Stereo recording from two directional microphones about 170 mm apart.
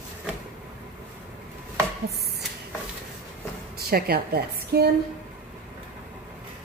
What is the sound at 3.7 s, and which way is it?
A woman's voice, 65° right (ahead or behind).